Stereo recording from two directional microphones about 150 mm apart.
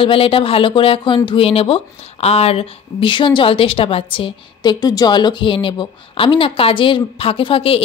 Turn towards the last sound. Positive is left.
turn(degrees=40)  # may be behind; listen again after turning